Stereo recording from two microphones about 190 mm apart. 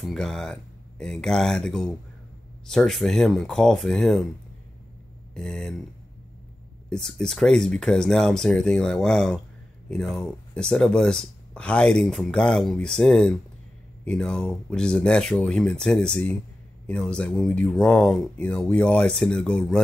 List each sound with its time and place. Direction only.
0.0 s speech: centre (ahead or behind)
5.3 s speech: 5° left (ahead or behind)
6.9 s speech: 5° left (ahead or behind)